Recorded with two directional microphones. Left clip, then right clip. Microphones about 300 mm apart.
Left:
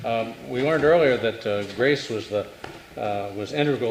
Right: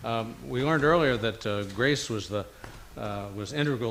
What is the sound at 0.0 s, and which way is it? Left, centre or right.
Speech, right.